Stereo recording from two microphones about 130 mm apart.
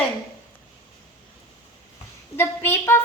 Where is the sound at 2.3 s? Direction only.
15° left (ahead or behind).